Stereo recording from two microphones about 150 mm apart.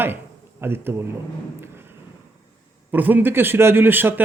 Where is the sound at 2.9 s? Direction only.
10° right (ahead or behind).